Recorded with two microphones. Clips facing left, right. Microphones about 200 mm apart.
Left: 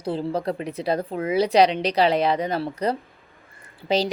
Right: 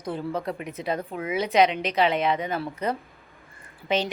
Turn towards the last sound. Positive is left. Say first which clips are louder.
# left 3 dB
turn(degrees=35)  # may be behind; listen again after turning